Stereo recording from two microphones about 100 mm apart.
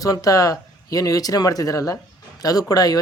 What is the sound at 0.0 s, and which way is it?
A man's voice, 35° left (ahead or behind).